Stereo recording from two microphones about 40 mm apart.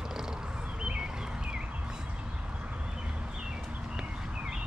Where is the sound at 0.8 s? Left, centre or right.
Right.